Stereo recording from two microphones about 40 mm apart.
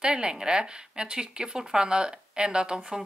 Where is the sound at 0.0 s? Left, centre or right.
Right.